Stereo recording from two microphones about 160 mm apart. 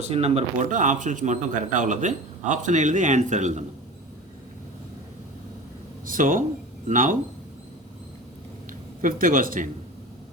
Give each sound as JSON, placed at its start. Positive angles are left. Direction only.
{"t": 0.0, "sound": "a man's voice", "side_deg": -40}
{"t": 6.1, "sound": "speech", "side_deg": -55}
{"t": 9.0, "sound": "speech", "side_deg": -60}